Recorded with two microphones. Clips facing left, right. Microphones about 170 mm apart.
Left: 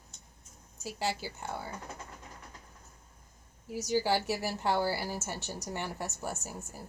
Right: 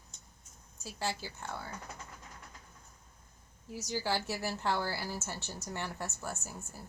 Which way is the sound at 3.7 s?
15° left (ahead or behind).